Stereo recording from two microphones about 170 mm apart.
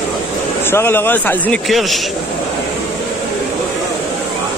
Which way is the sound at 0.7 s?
15° left (ahead or behind).